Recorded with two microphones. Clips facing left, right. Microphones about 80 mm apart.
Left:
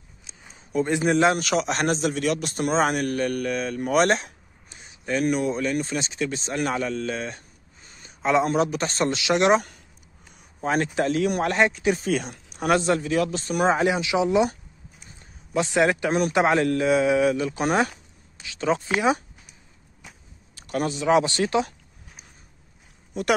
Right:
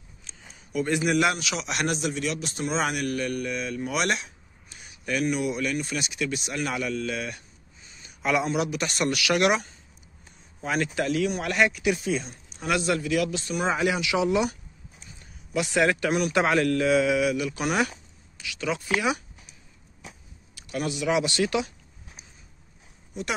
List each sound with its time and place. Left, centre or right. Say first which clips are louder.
0.3 s a sound: even; centre
0.7 s speech: left 3 dB; left
1.4 s a man's voice: left 6 dB; left
4.6 s a sound: left 2 dB; left
5.2 s speech: left 3 dB; left
8.2 s a man's voice: left 4 dB; left
8.5 s a man's voice: left 4 dB; left
10.6 s a man's voice: left 4 dB; left
12.1 s speech: left 3 dB; left
12.7 s a man's voice: left 3 dB; left
13.8 s a man's voice: left 2 dB; left
20.5 s a man's voice: left 3 dB; left